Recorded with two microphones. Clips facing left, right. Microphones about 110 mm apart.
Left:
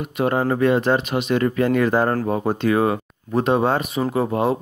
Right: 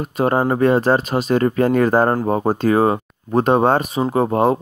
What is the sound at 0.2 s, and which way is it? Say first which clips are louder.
Speech: right 3 dB; 35° right (ahead or behind).